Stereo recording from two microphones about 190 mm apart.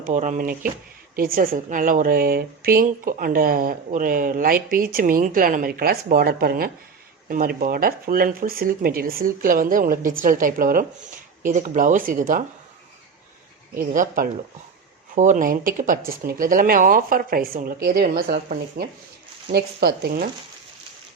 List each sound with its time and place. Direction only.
0.1 s a woman's voice: 40° right (ahead or behind)
13.9 s a woman's voice: 45° right (ahead or behind)